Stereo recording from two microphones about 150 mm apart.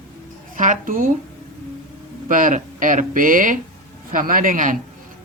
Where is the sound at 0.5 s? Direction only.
60° right (ahead or behind).